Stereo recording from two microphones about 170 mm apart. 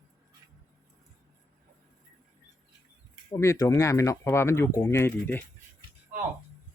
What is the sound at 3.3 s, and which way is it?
Speech, 15° left (ahead or behind).